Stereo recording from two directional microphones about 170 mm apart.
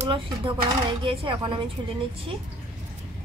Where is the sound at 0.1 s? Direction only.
30° right (ahead or behind).